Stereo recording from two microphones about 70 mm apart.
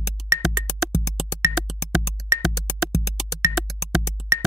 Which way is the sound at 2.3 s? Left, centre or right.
Right.